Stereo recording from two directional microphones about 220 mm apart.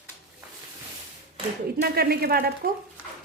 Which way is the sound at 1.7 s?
45° right (ahead or behind).